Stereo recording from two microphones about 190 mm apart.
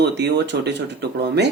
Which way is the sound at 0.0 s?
65° right (ahead or behind).